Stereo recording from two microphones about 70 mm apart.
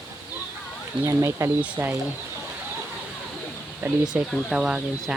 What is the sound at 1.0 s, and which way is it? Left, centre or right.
Speech, right.